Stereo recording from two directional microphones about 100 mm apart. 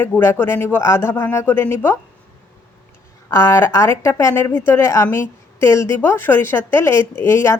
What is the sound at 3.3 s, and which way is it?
A woman's voice, 25° left (ahead or behind).